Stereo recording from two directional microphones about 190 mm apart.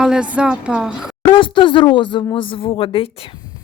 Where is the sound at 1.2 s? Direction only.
25° left (ahead or behind).